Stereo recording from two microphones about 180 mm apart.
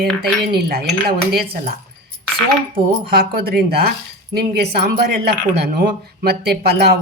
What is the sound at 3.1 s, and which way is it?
Speech, 55° right (ahead or behind).